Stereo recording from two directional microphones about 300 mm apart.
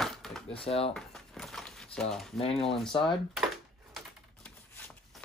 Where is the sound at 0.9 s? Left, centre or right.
Centre.